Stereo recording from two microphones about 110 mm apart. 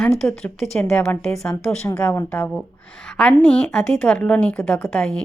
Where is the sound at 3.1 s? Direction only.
10° left (ahead or behind).